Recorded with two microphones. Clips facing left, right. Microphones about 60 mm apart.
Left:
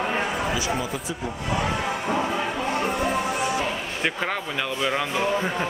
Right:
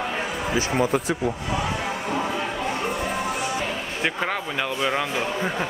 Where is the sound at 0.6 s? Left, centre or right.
Right.